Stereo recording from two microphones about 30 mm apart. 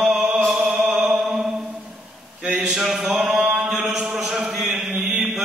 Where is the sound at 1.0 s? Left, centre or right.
Centre.